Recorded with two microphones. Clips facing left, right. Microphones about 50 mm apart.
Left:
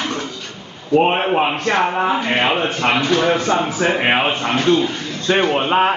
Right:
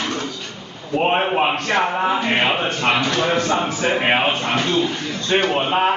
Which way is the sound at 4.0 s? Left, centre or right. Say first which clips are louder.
Left 1 dB; centre.